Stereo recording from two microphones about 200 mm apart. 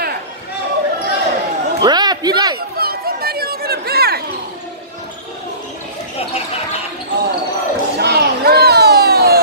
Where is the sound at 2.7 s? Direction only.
50° right (ahead or behind).